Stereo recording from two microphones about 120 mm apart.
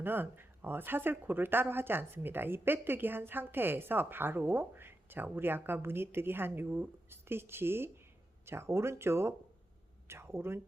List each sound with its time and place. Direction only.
0.0 s speech: 15° right (ahead or behind)